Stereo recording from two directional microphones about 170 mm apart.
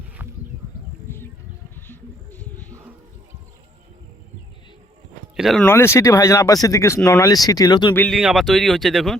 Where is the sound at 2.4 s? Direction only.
10° left (ahead or behind).